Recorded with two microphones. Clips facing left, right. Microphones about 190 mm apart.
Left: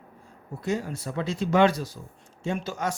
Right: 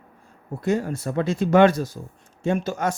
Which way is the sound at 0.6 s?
55° right (ahead or behind).